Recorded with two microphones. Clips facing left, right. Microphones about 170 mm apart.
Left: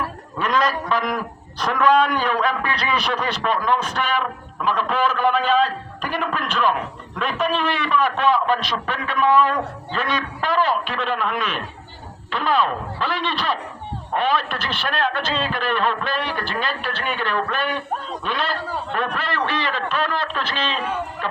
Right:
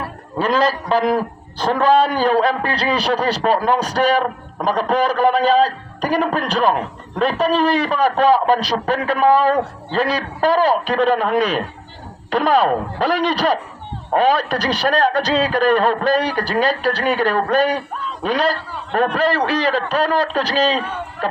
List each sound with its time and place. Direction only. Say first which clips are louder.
0.3 s a man's voice: right 4 dB; 30° right (ahead or behind)